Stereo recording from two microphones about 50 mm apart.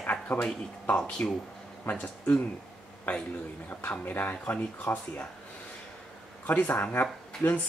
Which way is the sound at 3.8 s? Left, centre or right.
Left.